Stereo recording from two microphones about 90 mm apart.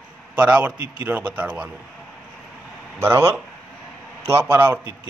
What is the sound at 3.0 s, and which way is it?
A man's voice, 30° right (ahead or behind).